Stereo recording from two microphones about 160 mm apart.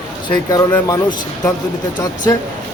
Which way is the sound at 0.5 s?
20° left (ahead or behind).